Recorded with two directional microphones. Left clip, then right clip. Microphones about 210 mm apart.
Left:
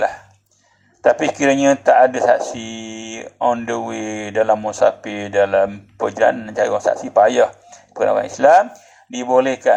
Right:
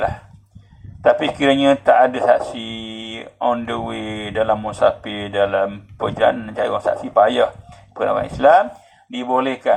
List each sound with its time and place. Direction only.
1.2 s speech: 35° left (ahead or behind)